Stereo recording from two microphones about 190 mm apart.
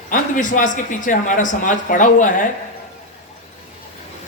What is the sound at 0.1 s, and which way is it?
Speech, 45° left (ahead or behind).